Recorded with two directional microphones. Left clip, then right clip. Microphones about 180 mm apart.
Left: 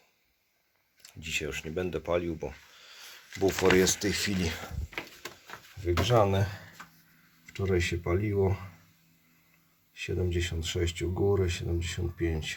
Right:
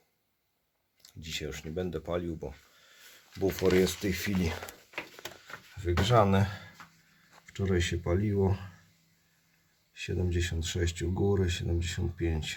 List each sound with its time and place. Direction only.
1.0 s speech: 5° right (ahead or behind)
3.4 s speech: 15° right (ahead or behind)
5.8 s speech: 10° right (ahead or behind)
10.0 s speech: 5° right (ahead or behind)